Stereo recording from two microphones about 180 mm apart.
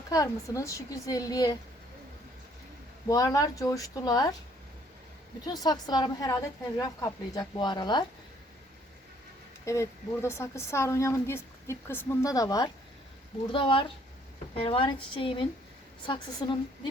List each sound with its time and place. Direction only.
0.1 s a woman's voice: 20° left (ahead or behind)
3.1 s a woman's voice: 20° left (ahead or behind)
5.5 s a woman's voice: 20° left (ahead or behind)
9.6 s a woman's voice: 15° left (ahead or behind)